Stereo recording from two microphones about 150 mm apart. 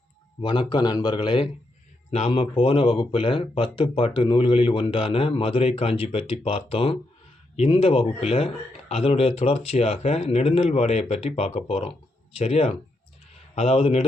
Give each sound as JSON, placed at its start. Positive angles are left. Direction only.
{"t": 0.4, "sound": "speech", "side_deg": 30}
{"t": 2.0, "sound": "a man's voice", "side_deg": 45}